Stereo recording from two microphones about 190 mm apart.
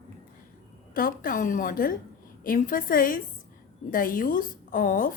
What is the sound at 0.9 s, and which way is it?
A woman's voice, 50° left (ahead or behind).